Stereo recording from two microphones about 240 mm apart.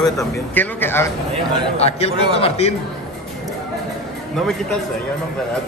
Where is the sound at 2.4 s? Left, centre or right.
Left.